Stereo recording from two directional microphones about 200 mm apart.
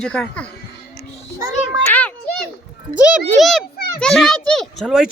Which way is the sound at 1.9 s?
5° left (ahead or behind).